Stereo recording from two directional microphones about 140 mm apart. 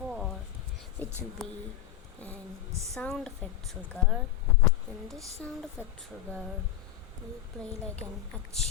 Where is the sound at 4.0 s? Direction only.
15° left (ahead or behind).